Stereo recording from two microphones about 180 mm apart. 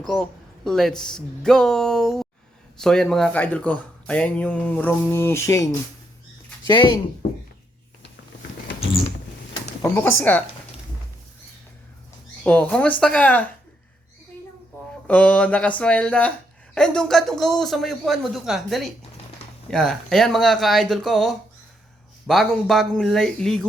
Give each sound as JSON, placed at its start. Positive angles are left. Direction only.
{"t": 0.0, "sound": "speech", "side_deg": 5}
{"t": 9.8, "sound": "speech", "side_deg": 15}
{"t": 12.4, "sound": "speech", "side_deg": 10}
{"t": 15.0, "sound": "speech", "side_deg": 10}